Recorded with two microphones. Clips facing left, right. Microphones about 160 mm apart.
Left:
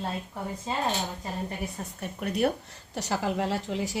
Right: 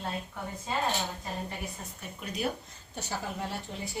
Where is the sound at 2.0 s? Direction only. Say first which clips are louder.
Left 8 dB; 60° left (ahead or behind).